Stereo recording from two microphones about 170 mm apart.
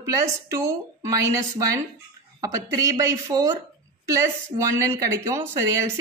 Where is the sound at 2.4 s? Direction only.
20° right (ahead or behind).